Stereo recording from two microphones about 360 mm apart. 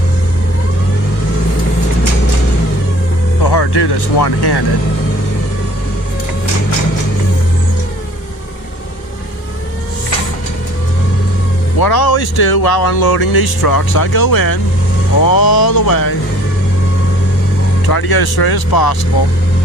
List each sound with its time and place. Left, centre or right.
3.5 s speech: left
11.8 s speech: left
17.8 s speech: left